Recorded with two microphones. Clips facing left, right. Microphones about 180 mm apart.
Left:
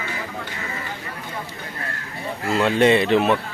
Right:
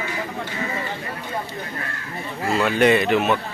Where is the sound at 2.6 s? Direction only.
30° left (ahead or behind).